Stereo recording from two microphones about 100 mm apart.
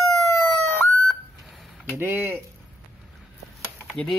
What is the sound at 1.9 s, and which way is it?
Speech, 20° right (ahead or behind).